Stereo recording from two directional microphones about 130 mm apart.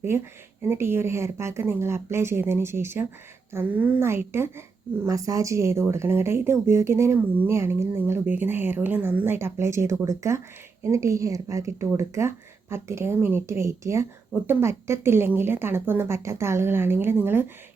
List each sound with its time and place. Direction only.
0.1 s a woman's voice: 20° right (ahead or behind)